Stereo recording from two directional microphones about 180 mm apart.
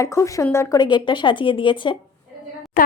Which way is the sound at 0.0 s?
15° left (ahead or behind).